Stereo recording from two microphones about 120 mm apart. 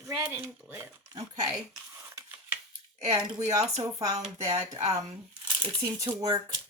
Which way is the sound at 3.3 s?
30° right (ahead or behind).